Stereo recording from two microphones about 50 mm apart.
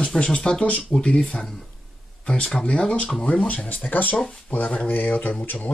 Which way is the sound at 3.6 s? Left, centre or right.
Left.